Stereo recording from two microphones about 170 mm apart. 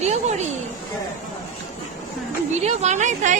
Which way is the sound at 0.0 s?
40° right (ahead or behind).